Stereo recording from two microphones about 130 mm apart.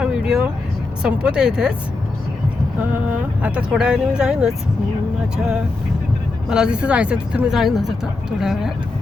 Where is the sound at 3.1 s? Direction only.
10° right (ahead or behind).